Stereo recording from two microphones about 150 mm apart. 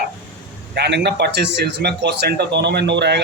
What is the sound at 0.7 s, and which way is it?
A man's voice, 90° right.